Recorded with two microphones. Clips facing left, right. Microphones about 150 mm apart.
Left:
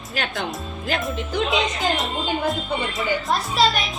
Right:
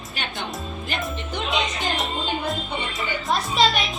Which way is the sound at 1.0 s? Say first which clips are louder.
Left 5 dB; centre (ahead or behind).